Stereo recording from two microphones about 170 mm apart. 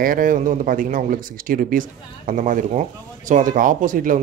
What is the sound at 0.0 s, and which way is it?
Speech, 55° right (ahead or behind).